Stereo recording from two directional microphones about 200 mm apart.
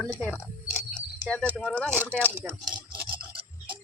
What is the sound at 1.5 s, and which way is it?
Speech, 5° left (ahead or behind).